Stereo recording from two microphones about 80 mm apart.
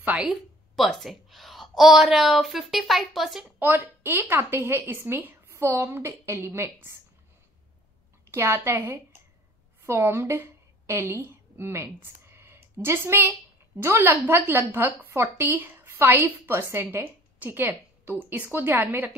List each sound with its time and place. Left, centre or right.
0.2 s a sound: centre
0.8 s a woman's voice: centre
3.4 s a woman's voice: right
8.3 s a woman's voice: right